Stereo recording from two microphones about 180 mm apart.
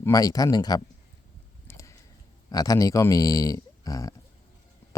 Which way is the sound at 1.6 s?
15° left (ahead or behind).